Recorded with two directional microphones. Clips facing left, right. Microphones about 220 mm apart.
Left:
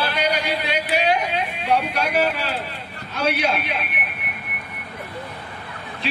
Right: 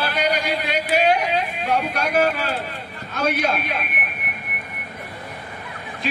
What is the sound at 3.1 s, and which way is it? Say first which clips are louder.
Speech: even; 45° right (ahead or behind).